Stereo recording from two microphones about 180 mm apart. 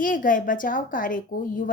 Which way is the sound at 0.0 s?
50° left (ahead or behind).